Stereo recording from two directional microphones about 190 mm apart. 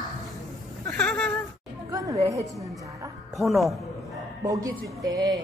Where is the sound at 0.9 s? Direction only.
5° left (ahead or behind).